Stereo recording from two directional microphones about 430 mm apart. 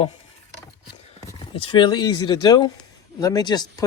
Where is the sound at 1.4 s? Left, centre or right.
Centre.